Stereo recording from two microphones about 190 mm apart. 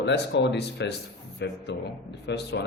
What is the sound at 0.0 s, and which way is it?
Speech, 65° left (ahead or behind).